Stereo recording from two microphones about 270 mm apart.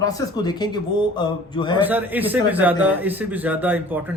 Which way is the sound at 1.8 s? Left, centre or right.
Centre.